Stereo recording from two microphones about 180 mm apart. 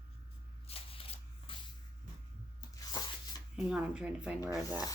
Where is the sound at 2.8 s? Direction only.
20° left (ahead or behind).